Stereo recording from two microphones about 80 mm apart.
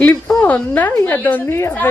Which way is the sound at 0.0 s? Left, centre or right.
Left.